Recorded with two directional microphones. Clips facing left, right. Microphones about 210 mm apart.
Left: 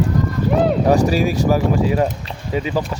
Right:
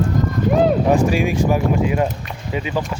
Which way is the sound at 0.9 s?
35° left (ahead or behind).